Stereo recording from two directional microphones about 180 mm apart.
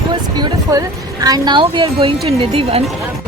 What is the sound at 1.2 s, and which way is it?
Speech, 20° right (ahead or behind).